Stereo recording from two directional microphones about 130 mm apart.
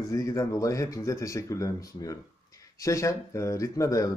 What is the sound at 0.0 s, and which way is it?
Speech, 25° left (ahead or behind).